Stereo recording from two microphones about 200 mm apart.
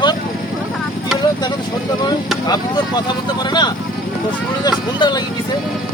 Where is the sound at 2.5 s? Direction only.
20° left (ahead or behind).